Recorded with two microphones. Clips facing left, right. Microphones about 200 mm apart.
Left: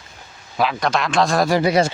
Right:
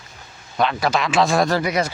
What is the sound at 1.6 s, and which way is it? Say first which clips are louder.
Speech: left 5 dB; 30° left (ahead or behind).